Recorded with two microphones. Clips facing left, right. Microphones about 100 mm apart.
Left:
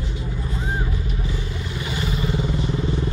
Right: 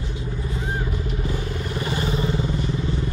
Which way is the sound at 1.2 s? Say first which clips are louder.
Right 2 dB; 45° right (ahead or behind).